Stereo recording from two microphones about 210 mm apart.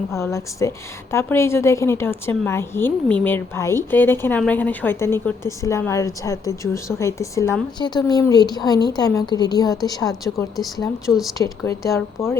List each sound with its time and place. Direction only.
0.2 s a woman's voice: 15° left (ahead or behind)
11.0 s speech: centre (ahead or behind)
11.3 s a woman's voice: 15° left (ahead or behind)